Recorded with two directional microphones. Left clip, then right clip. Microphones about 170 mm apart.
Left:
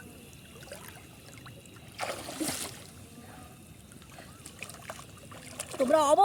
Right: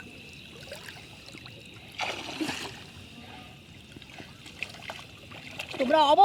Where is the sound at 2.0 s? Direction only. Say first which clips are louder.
Right 2 dB; 35° left (ahead or behind).